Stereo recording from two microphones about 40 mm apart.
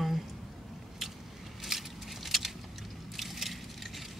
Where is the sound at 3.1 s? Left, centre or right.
Centre.